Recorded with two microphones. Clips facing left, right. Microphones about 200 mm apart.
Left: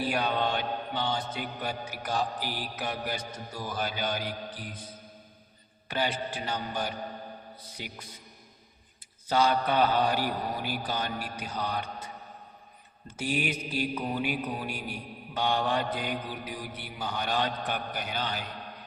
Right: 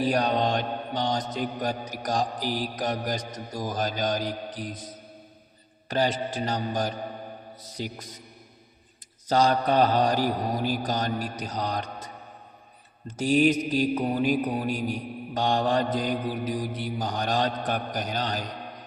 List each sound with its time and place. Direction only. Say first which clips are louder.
0.0 s mantra: right 5 dB; 40° right (ahead or behind)
5.9 s mantra: right 5 dB; 40° right (ahead or behind)
9.2 s mantra: right 3 dB; 40° right (ahead or behind)
13.1 s mantra: right 10 dB; 35° right (ahead or behind)